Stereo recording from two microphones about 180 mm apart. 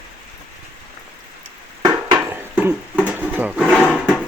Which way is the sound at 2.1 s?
15° right (ahead or behind).